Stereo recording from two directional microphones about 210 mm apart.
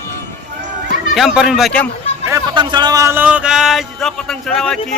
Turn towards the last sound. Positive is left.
turn(degrees=5)  # may be behind; listen again after turning